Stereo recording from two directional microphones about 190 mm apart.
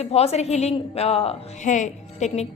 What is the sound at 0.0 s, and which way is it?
A woman's voice, 35° left (ahead or behind).